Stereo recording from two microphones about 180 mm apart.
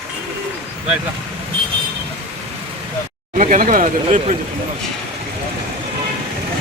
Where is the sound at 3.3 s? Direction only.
45° right (ahead or behind).